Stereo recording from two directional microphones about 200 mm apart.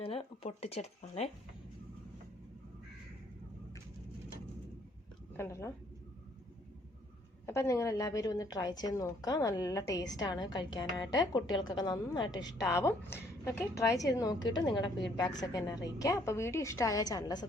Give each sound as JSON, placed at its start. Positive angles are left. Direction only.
{"t": 0.0, "sound": "speech", "side_deg": 30}
{"t": 5.4, "sound": "a woman's voice", "side_deg": 15}
{"t": 7.4, "sound": "a woman's voice", "side_deg": 15}